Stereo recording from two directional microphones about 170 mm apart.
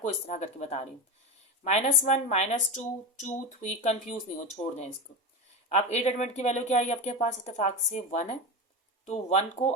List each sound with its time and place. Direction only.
0.3 s speech: 45° left (ahead or behind)